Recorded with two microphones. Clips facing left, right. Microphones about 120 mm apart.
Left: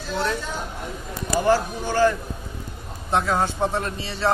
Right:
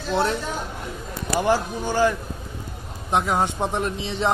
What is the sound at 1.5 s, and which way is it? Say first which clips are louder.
A man's voice: left 2 dB; 15° right (ahead or behind).